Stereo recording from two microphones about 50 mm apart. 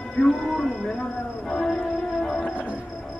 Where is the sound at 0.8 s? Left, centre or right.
Centre.